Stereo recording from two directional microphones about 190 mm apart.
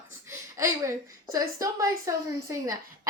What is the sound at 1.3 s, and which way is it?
A woman's voice, 15° right (ahead or behind).